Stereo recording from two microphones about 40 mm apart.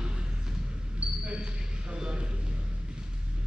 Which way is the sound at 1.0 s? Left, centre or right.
Right.